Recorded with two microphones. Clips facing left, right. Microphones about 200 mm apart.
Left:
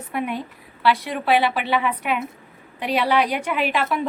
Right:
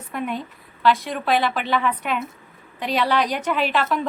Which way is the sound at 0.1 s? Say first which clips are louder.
Left 1 dB; 10° left (ahead or behind).